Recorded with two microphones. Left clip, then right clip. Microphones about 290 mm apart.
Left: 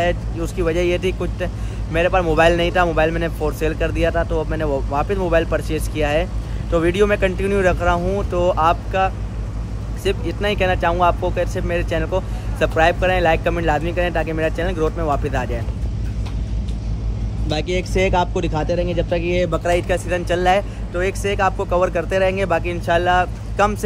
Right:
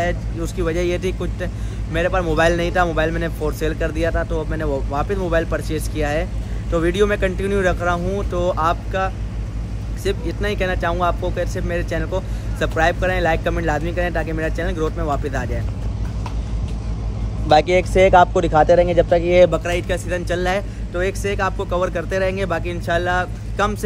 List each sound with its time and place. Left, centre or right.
0.0 s speech: centre
17.5 s speech: centre